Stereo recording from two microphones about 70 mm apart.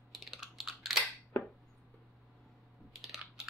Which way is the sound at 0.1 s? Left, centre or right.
Centre.